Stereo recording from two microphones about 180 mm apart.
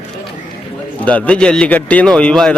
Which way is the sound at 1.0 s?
5° left (ahead or behind).